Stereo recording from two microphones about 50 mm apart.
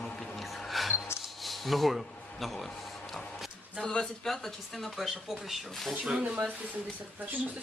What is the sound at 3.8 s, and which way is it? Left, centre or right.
Speech, centre.